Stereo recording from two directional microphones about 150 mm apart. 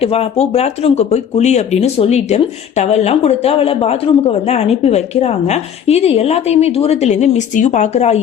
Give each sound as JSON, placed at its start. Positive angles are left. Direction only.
{"t": 0.0, "sound": "speech", "side_deg": 40}